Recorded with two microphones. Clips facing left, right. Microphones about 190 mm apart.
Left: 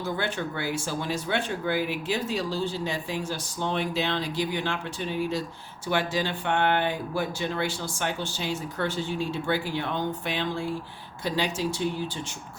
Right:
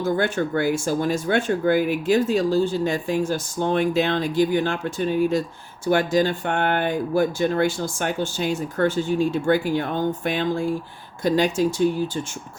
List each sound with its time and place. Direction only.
0.0 s speech: 45° right (ahead or behind)